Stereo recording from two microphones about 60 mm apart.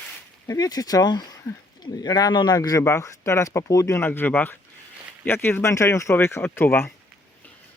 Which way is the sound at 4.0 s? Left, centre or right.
Left.